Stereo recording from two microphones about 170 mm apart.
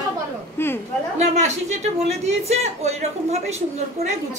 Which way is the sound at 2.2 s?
40° right (ahead or behind).